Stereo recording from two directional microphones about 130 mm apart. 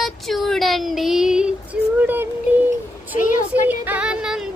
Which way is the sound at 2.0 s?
15° right (ahead or behind).